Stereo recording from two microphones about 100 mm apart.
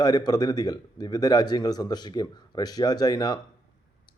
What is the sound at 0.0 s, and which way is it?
A man's voice, 40° left (ahead or behind).